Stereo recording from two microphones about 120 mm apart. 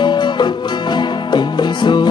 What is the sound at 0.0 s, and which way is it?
Music, 40° left (ahead or behind).